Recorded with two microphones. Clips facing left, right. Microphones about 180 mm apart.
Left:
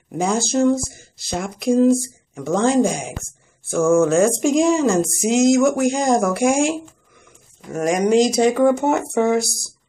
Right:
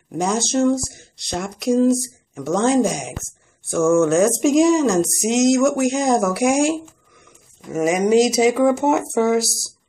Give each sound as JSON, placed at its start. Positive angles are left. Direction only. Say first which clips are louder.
{"t": 0.1, "sound": "speech", "louder": "even", "side_deg": 0}